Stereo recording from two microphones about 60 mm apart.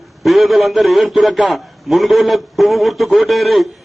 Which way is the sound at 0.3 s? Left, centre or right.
Centre.